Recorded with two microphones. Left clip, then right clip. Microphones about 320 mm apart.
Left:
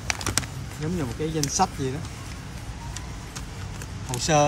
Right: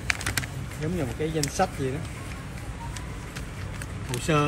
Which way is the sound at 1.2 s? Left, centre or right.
Centre.